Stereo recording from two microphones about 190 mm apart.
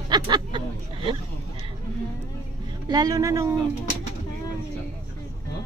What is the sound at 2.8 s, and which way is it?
Speech, 20° right (ahead or behind).